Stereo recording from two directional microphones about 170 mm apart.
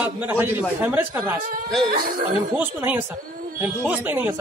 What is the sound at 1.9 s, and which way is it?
Speech, 60° right (ahead or behind).